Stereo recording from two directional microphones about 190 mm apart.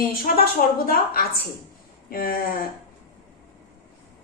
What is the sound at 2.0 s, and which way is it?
Speech, 50° left (ahead or behind).